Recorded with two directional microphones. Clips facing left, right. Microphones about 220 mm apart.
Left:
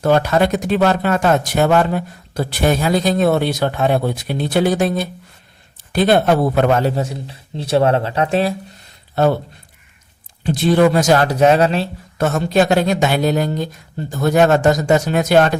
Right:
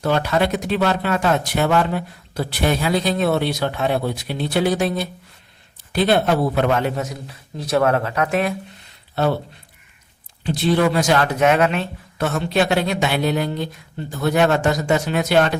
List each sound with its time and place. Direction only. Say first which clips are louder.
0.0 s a man's voice: left 4 dB; 45° left (ahead or behind); by 8.5 s 30° left (ahead or behind)
10.4 s speech: left 4 dB; 50° left (ahead or behind)